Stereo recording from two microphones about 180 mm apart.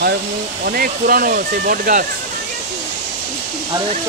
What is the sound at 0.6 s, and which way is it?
Speech, 55° right (ahead or behind).